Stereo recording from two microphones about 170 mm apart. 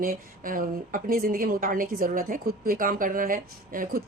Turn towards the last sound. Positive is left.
turn(degrees=-55)  # may be behind; listen again after turning